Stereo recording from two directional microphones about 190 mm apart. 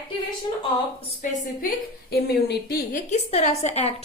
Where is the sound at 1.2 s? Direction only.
50° left (ahead or behind).